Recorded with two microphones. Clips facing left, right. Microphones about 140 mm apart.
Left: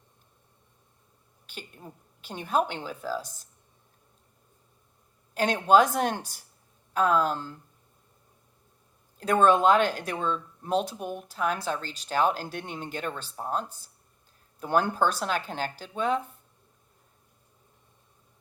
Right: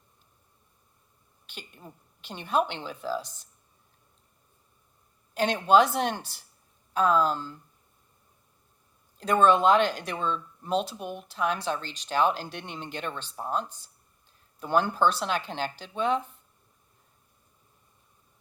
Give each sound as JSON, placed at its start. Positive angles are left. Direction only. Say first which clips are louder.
{"t": 1.5, "sound": "a woman's voice", "louder": "left 2 dB", "side_deg": 40}
{"t": 5.3, "sound": "a woman's voice", "louder": "even", "side_deg": 40}
{"t": 9.1, "sound": "a woman's voice", "louder": "even", "side_deg": 45}